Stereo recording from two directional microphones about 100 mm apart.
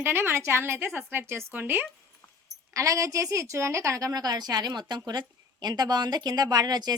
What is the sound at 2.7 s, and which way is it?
A woman's voice, 35° right (ahead or behind).